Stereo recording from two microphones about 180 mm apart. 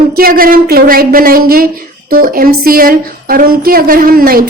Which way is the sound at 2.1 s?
55° right (ahead or behind).